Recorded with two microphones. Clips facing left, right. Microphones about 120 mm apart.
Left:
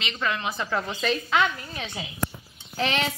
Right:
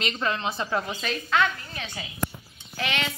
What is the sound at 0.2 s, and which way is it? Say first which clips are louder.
Speech: left 2 dB; 30° right (ahead or behind).